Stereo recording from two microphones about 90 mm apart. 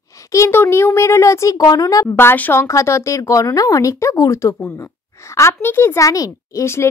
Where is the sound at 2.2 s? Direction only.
25° left (ahead or behind).